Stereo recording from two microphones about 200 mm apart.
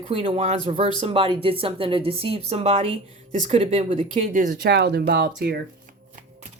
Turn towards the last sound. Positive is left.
turn(degrees=-55)  # may be behind; listen again after turning